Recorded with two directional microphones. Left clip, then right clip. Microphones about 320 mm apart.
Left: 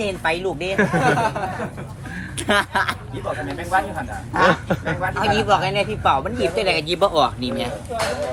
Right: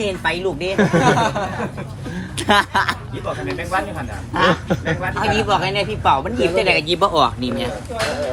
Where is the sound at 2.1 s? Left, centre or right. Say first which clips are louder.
Right 4 dB; centre.